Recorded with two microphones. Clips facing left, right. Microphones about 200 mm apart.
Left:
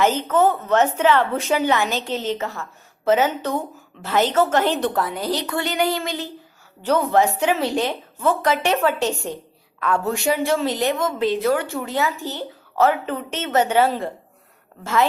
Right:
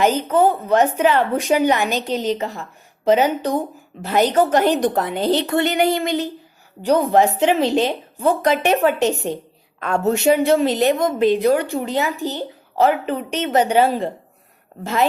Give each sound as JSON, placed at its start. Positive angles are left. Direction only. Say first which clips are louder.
{"t": 0.7, "sound": "a woman's voice", "louder": "right 1 dB", "side_deg": -15}